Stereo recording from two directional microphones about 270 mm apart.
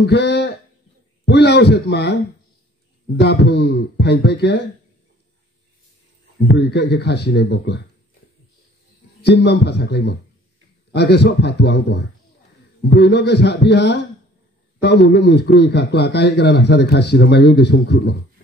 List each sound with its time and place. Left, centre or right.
0.0 s a man's voice: left
3.2 s a man's voice: left
6.4 s a man's voice: left
9.2 s a man's voice: left